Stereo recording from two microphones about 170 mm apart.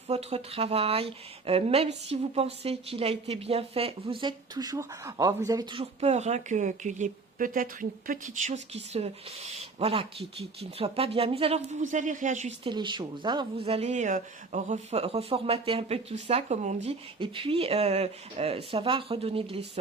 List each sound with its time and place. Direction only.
0.1 s speech: 40° right (ahead or behind); by 5.8 s 20° right (ahead or behind)
5.8 s speech: 40° right (ahead or behind)
12.6 s speech: 30° right (ahead or behind)